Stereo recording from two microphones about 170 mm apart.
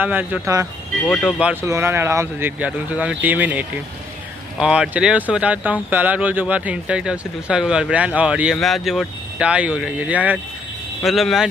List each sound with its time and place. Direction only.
0.0 s speech: 10° right (ahead or behind)
1.0 s speech: centre (ahead or behind)
1.5 s speech: 15° right (ahead or behind)